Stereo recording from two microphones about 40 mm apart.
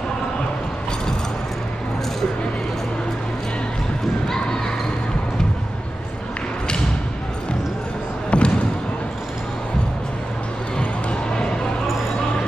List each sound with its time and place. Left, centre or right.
8.3 s basketball bounce: left